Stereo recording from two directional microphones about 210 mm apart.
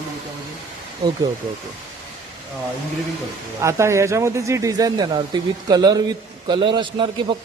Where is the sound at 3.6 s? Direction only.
15° right (ahead or behind).